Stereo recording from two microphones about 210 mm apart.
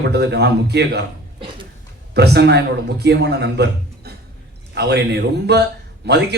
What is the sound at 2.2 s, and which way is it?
Speech, 55° right (ahead or behind).